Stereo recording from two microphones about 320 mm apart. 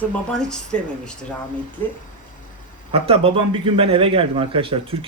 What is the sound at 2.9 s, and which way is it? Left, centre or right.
A man's voice, centre.